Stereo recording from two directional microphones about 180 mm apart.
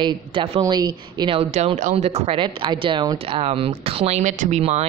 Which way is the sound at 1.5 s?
40° right (ahead or behind).